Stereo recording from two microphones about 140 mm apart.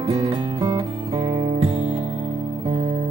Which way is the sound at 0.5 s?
25° right (ahead or behind).